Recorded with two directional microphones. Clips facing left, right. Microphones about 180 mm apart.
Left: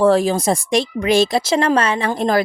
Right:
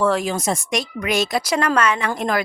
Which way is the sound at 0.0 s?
35° left (ahead or behind).